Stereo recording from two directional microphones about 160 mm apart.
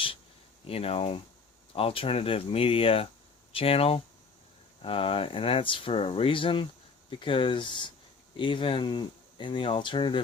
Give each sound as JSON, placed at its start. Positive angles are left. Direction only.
{"t": 0.7, "sound": "speech", "side_deg": 35}